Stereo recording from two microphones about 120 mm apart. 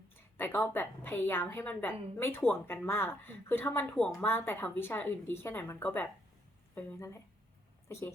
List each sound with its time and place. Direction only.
0.3 s speech: 15° left (ahead or behind)